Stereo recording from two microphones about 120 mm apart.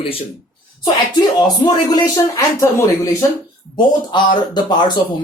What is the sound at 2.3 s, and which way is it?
Speech, 25° left (ahead or behind).